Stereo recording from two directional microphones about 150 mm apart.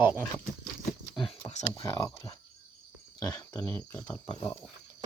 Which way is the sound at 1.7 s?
20° left (ahead or behind).